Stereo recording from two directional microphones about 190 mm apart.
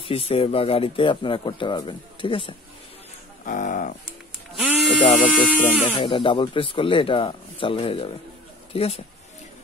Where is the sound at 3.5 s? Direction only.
45° left (ahead or behind).